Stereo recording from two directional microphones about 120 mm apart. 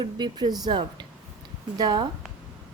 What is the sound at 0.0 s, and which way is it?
A woman's voice, 35° right (ahead or behind).